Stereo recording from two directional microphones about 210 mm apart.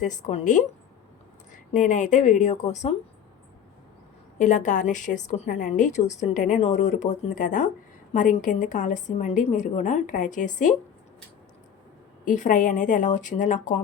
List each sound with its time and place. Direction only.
0.0 s a woman's voice: 35° left (ahead or behind)
4.4 s a woman's voice: 35° left (ahead or behind)
12.2 s a woman's voice: 35° left (ahead or behind)